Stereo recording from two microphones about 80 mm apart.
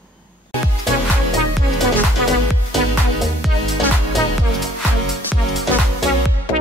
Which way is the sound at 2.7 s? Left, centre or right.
Centre.